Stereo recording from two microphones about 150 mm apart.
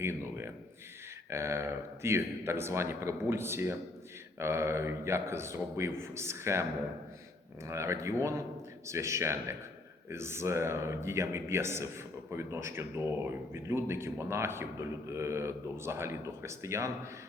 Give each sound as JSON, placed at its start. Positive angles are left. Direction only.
{"t": 0.0, "sound": "a man's voice", "side_deg": -15}
{"t": 7.7, "sound": "a man's voice", "side_deg": -20}